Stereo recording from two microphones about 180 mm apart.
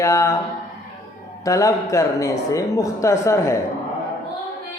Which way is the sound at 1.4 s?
20° left (ahead or behind).